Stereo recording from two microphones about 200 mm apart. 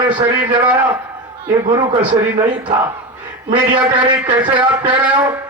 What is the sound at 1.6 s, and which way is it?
A man's voice, 30° right (ahead or behind).